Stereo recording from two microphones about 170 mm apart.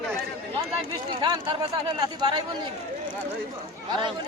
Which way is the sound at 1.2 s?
25° right (ahead or behind).